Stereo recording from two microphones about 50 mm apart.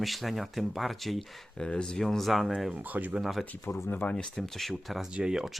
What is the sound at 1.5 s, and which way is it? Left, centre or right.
Speech, centre.